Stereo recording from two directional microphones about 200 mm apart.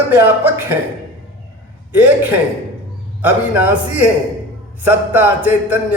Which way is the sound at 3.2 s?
10° right (ahead or behind).